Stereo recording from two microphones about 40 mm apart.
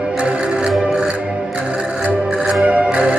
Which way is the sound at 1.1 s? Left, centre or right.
Right.